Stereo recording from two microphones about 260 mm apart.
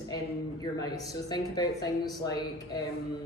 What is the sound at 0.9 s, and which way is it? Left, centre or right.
Speech, centre.